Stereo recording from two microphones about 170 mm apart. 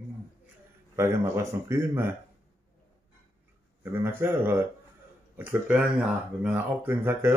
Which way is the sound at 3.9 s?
15° right (ahead or behind).